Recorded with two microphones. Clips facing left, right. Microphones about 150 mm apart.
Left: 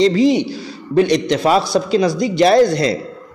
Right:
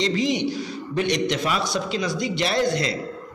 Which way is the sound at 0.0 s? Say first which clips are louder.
Left 9 dB; 35° left (ahead or behind).